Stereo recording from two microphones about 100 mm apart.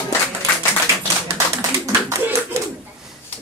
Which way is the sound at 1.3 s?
35° right (ahead or behind).